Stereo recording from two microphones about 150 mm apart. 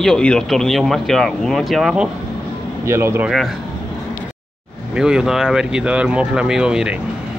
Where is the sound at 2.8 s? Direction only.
15° right (ahead or behind).